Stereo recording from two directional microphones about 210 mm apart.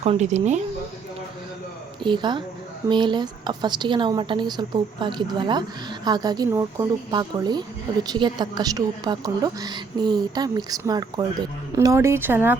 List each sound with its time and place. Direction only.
0.0 s speech: 30° right (ahead or behind)
2.0 s a woman's voice: 20° right (ahead or behind)